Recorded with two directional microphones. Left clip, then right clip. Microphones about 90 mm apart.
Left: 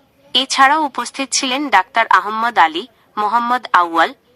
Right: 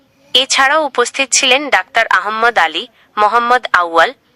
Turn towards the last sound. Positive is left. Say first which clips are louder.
# right 2 dB
turn(degrees=40)  # may be behind; listen again after turning